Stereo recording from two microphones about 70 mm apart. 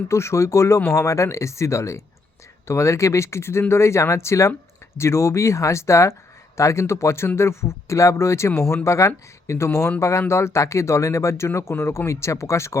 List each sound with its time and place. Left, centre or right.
0.1 s speech: left